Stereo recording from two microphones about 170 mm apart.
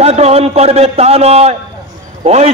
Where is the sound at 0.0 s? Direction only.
40° right (ahead or behind).